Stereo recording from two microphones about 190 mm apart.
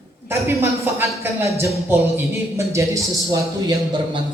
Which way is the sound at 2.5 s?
15° right (ahead or behind).